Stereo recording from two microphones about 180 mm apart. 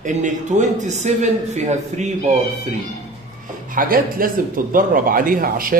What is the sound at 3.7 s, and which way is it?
A man's voice, 50° right (ahead or behind).